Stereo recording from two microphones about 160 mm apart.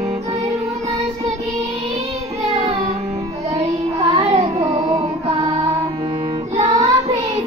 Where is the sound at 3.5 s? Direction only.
35° right (ahead or behind).